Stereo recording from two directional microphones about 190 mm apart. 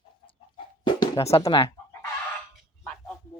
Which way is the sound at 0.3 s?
25° left (ahead or behind).